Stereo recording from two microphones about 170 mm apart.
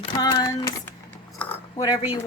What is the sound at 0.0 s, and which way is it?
Speech, 25° left (ahead or behind).